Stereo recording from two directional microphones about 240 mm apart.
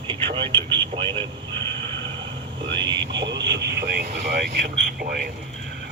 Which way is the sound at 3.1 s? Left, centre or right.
Right.